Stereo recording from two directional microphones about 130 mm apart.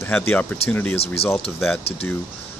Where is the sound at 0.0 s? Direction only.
15° left (ahead or behind).